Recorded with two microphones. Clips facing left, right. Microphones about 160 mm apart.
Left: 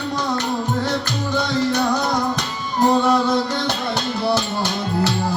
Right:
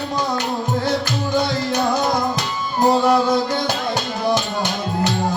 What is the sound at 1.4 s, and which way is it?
Music, 10° right (ahead or behind).